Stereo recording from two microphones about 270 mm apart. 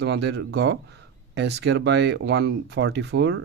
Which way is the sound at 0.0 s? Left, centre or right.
Right.